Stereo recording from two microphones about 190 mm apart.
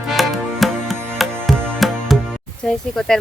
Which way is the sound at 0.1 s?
Centre (ahead or behind).